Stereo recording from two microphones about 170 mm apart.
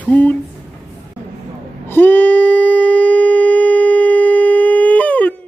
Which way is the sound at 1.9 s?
10° left (ahead or behind).